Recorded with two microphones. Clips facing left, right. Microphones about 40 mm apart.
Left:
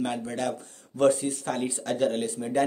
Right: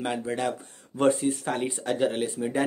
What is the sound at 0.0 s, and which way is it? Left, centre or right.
Speech, centre.